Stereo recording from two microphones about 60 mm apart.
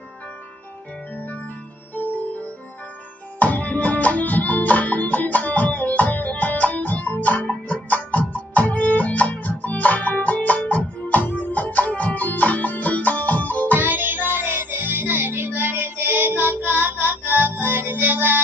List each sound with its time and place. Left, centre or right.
2.0 s music: left
13.7 s music: right